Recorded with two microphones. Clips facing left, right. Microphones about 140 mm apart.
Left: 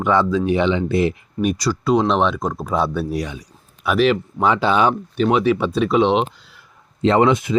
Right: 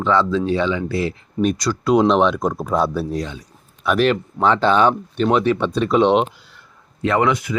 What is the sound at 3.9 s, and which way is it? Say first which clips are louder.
Speech: left 2 dB; 5° left (ahead or behind).